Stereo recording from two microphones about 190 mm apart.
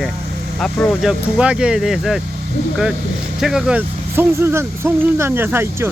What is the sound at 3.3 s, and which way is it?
Speech, centre (ahead or behind).